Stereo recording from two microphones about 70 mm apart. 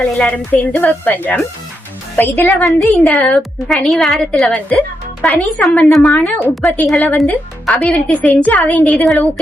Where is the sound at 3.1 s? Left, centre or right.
Centre.